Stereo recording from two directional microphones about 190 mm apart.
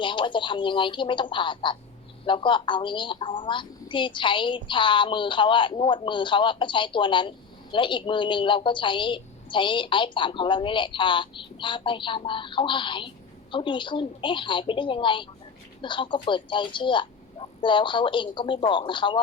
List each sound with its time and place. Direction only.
0.0 s a woman's voice: 25° left (ahead or behind)